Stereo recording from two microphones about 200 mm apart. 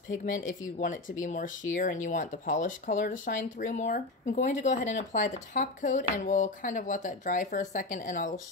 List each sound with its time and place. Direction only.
0.2 s speech: 40° left (ahead or behind)